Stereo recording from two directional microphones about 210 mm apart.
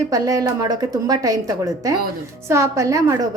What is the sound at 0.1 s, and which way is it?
Speech, 15° right (ahead or behind).